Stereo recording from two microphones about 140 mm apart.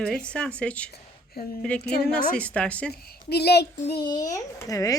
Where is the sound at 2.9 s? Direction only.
90° left.